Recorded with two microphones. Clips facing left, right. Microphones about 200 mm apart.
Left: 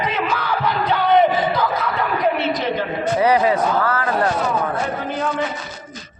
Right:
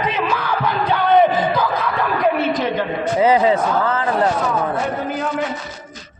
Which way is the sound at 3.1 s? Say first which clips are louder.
Right 2 dB; 25° right (ahead or behind).